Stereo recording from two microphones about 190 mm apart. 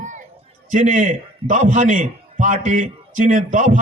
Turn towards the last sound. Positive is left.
turn(degrees=-40)  # may be behind; listen again after turning